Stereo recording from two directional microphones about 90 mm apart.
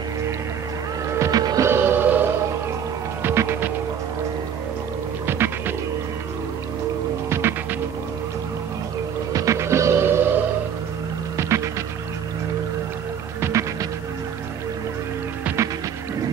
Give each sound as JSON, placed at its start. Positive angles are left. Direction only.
{"t": 1.2, "sound": "music", "side_deg": -45}
{"t": 1.7, "sound": "music", "side_deg": -25}
{"t": 7.2, "sound": "music", "side_deg": -30}
{"t": 9.3, "sound": "music", "side_deg": -35}
{"t": 13.4, "sound": "music", "side_deg": -35}